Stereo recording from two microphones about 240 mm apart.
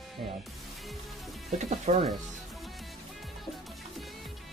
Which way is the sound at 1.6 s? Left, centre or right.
Right.